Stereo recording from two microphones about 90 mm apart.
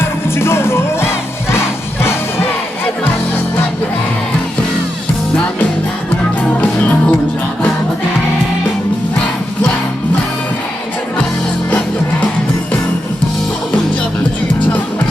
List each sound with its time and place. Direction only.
0.0 s music: 30° left (ahead or behind)
6.6 s music: 20° left (ahead or behind)